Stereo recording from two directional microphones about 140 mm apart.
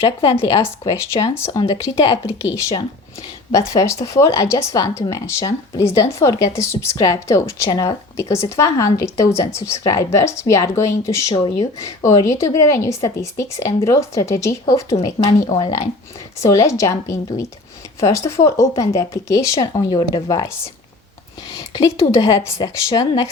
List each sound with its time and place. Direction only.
0.3 s speech: 20° left (ahead or behind)
11.4 s speech: 35° left (ahead or behind)
11.8 s speech: 20° left (ahead or behind)
21.5 s speech: 25° left (ahead or behind)